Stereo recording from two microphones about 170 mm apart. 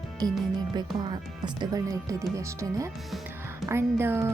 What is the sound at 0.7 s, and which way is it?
Speech, 25° right (ahead or behind).